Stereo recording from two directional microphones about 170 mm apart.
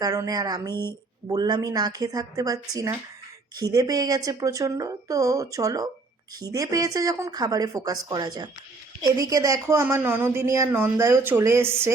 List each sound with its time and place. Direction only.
0.0 s speech: 20° right (ahead or behind)